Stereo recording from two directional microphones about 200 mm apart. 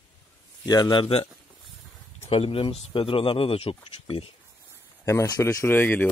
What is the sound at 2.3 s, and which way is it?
Speech, 30° left (ahead or behind).